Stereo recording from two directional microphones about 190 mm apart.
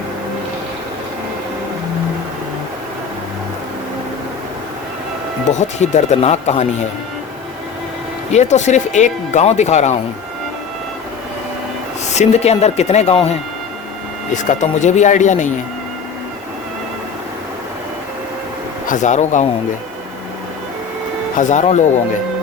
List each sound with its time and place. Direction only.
5.5 s speech: 40° left (ahead or behind)
8.3 s speech: 35° left (ahead or behind)
12.1 s speech: 35° left (ahead or behind)
14.3 s speech: 40° left (ahead or behind)
18.9 s speech: 40° left (ahead or behind)
21.3 s speech: 40° left (ahead or behind)